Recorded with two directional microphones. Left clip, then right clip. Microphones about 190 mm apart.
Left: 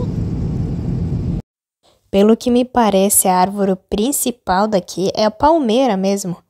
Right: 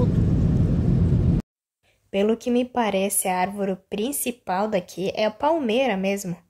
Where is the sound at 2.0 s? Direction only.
45° left (ahead or behind).